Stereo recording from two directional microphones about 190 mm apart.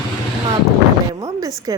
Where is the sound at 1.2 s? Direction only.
20° right (ahead or behind).